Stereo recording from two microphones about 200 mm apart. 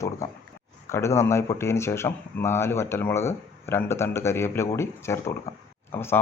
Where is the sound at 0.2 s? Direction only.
15° left (ahead or behind).